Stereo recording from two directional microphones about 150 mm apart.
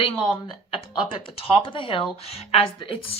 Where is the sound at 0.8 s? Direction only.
35° left (ahead or behind).